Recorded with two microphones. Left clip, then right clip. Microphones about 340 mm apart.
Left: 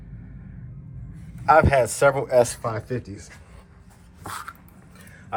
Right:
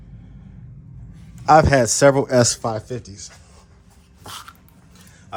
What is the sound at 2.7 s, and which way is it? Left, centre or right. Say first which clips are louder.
Speech: right 3 dB; centre.